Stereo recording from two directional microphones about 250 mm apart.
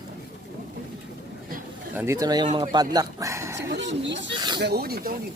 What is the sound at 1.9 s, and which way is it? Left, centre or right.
Speech, centre.